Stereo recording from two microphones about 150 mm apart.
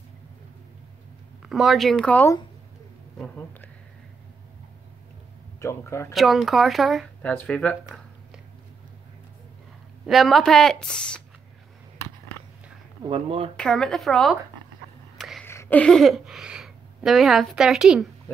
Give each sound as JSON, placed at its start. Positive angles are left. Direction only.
{"t": 1.4, "sound": "speech", "side_deg": 0}
{"t": 5.6, "sound": "speech", "side_deg": 20}
{"t": 6.1, "sound": "speech", "side_deg": 0}
{"t": 10.0, "sound": "speech", "side_deg": 0}
{"t": 13.0, "sound": "speech", "side_deg": -35}
{"t": 13.6, "sound": "speech", "side_deg": 5}
{"t": 15.1, "sound": "a sound", "side_deg": 0}
{"t": 15.4, "sound": "speech", "side_deg": 15}